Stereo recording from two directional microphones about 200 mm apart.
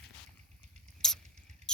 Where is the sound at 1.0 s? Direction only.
Centre (ahead or behind).